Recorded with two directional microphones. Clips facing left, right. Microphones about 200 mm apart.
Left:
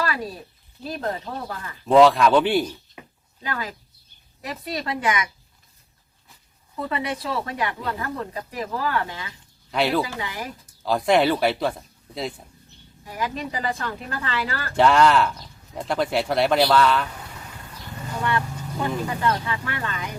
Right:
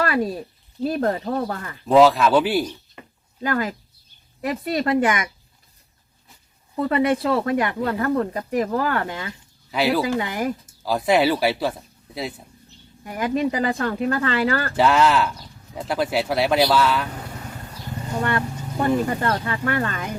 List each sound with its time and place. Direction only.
0.9 s speech: 50° right (ahead or behind)
1.9 s speech: 5° right (ahead or behind)
3.4 s speech: 45° right (ahead or behind)
6.7 s speech: 45° right (ahead or behind)
9.7 s speech: 5° right (ahead or behind)
10.2 s speech: 50° right (ahead or behind)
10.8 s speech: 5° right (ahead or behind)
13.1 s speech: 50° right (ahead or behind)
14.8 s speech: 5° right (ahead or behind)
18.2 s speech: 50° right (ahead or behind)